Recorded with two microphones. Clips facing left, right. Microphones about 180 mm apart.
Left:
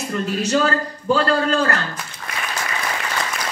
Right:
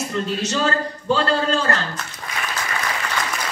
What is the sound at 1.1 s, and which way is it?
Speech, 30° right (ahead or behind).